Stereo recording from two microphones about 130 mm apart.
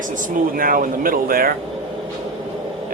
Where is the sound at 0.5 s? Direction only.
90° right.